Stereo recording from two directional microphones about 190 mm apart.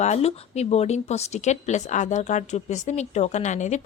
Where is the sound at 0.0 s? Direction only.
35° left (ahead or behind).